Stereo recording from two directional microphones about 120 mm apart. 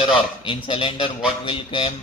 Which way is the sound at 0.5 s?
45° left (ahead or behind).